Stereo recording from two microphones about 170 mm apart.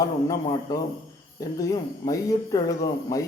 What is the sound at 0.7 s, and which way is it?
Speech, 20° left (ahead or behind).